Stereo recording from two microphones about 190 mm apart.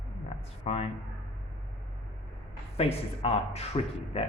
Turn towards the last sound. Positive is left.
turn(degrees=30)  # may be behind; listen again after turning